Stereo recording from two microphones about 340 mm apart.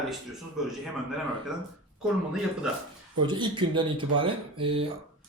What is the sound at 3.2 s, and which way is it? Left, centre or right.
Speech, centre.